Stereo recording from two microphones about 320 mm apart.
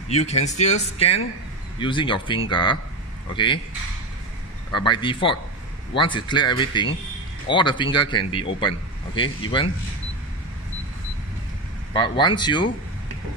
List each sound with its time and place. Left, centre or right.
0.1 s speech: centre
4.7 s speech: centre
11.9 s speech: centre